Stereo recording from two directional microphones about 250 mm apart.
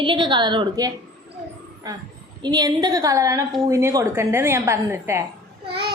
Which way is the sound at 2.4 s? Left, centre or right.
Centre.